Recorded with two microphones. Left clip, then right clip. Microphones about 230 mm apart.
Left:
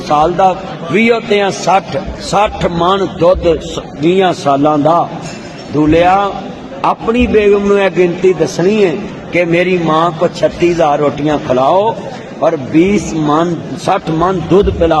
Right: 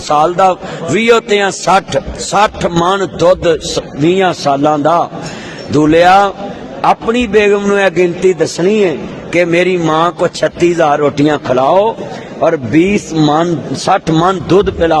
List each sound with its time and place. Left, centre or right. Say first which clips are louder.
0.1 s a man's voice: right 1 dB; right